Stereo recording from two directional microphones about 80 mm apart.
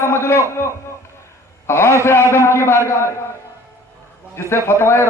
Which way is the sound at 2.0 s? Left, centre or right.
Left.